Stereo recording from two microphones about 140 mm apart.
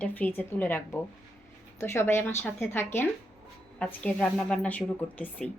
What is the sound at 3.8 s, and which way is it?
A woman's voice, 5° left (ahead or behind).